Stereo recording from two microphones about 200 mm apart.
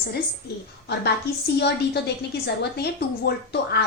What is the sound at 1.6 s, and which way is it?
A woman's voice, 55° left (ahead or behind).